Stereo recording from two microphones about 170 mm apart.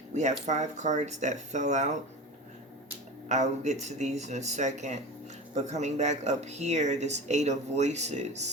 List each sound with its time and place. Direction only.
0.1 s speech: 45° right (ahead or behind)
3.2 s speech: 40° right (ahead or behind)